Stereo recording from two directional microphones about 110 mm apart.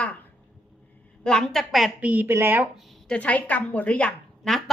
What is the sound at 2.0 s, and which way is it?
Speech, 15° right (ahead or behind).